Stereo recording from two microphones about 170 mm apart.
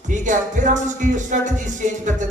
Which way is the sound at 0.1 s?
45° right (ahead or behind).